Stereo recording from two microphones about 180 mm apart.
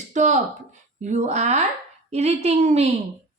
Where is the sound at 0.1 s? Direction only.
40° right (ahead or behind).